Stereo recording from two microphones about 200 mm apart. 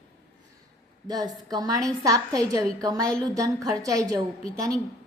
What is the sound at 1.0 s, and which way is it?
A woman's voice, 20° right (ahead or behind).